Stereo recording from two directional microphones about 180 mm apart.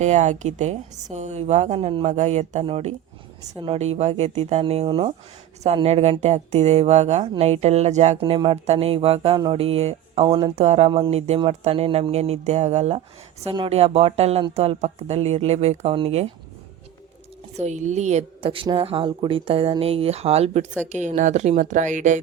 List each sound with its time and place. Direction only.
0.0 s speech: 40° right (ahead or behind)
3.4 s speech: 25° right (ahead or behind)
3.8 s speech: 35° right (ahead or behind)
17.6 s speech: 40° right (ahead or behind)